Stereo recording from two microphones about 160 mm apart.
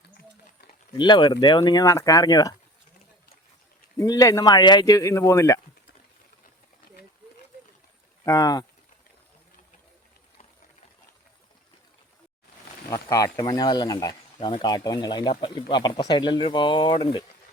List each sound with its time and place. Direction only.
0.9 s speech: 30° left (ahead or behind)
3.9 s speech: 20° left (ahead or behind)
8.2 s speech: 20° left (ahead or behind)
12.9 s speech: 20° left (ahead or behind)